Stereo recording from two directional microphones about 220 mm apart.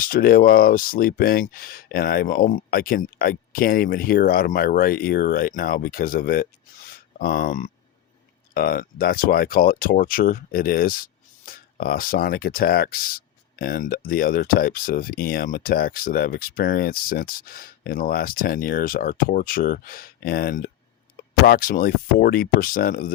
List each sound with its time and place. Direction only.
0.0 s speech: 40° left (ahead or behind)